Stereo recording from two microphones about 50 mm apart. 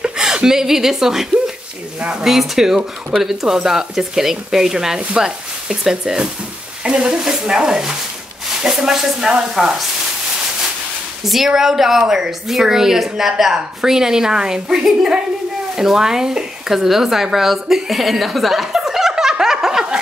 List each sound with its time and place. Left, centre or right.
0.0 s a woman's voice: centre
2.2 s speech: centre
11.2 s speech: centre